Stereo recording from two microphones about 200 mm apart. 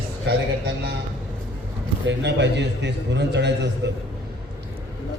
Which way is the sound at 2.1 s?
60° right (ahead or behind).